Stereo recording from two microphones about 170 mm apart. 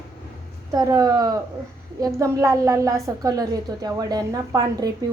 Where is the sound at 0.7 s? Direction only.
20° right (ahead or behind).